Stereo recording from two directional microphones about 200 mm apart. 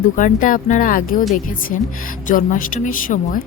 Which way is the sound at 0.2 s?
40° left (ahead or behind).